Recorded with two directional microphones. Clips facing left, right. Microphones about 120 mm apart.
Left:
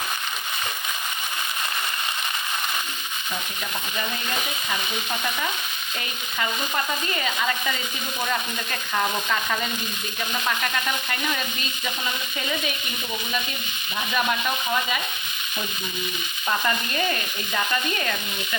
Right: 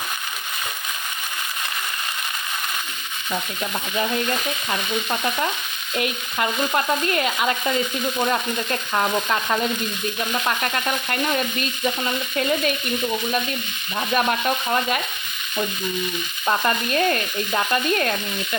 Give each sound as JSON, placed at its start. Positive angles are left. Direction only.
{"t": 7.1, "sound": "stir", "side_deg": -60}
{"t": 16.6, "sound": "stir", "side_deg": -60}